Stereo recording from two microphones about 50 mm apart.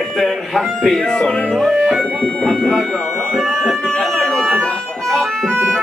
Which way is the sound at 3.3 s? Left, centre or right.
Centre.